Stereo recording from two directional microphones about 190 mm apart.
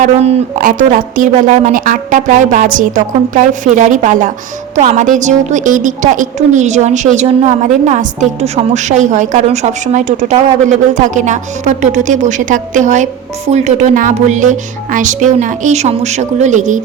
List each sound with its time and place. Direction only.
0.0 s a woman's voice: 40° right (ahead or behind)